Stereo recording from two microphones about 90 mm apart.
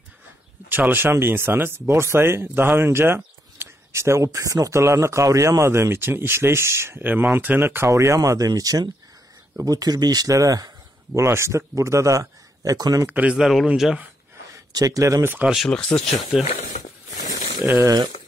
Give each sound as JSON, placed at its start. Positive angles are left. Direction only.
{"t": 0.7, "sound": "speech", "side_deg": -20}
{"t": 13.0, "sound": "speech", "side_deg": -15}
{"t": 13.4, "sound": "speech", "side_deg": 0}
{"t": 14.5, "sound": "speech", "side_deg": -40}
{"t": 15.2, "sound": "speech", "side_deg": -20}
{"t": 15.5, "sound": "speech", "side_deg": 5}
{"t": 17.6, "sound": "speech", "side_deg": -30}